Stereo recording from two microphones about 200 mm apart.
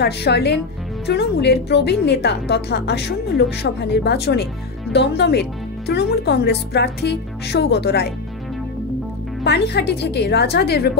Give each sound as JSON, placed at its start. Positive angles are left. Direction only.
{"t": 0.0, "sound": "a woman's voice", "side_deg": 55}
{"t": 9.4, "sound": "a woman's voice", "side_deg": 55}